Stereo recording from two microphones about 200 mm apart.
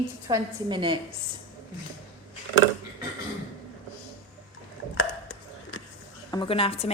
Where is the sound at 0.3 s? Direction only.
20° right (ahead or behind).